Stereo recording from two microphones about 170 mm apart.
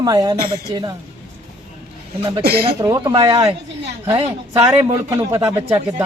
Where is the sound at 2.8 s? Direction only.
20° right (ahead or behind).